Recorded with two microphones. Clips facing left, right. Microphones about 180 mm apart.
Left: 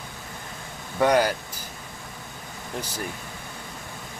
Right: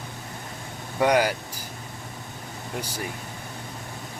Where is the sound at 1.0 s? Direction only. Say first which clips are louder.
Left 1 dB; 10° right (ahead or behind).